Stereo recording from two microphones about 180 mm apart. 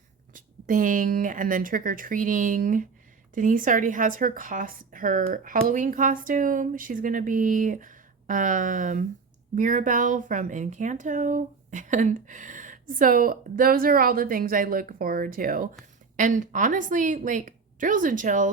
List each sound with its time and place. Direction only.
0.3 s speech: 45° right (ahead or behind)